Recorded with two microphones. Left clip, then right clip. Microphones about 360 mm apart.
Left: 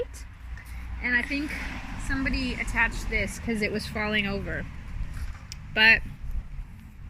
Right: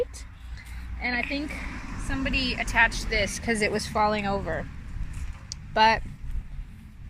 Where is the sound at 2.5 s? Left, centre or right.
Centre.